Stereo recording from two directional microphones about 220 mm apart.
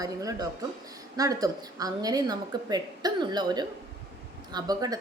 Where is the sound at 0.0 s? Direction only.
15° right (ahead or behind).